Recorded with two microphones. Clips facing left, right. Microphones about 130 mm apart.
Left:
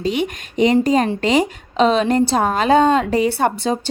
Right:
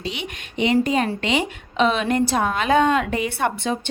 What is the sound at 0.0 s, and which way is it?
A woman's voice, 45° left (ahead or behind).